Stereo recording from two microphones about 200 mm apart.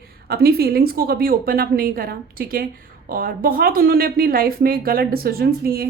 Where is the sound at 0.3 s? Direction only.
50° right (ahead or behind).